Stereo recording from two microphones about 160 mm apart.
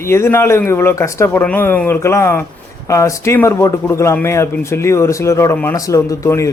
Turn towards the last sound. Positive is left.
turn(degrees=20)  # may be behind; listen again after turning